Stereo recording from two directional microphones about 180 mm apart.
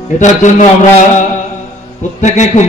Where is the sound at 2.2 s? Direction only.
40° left (ahead or behind).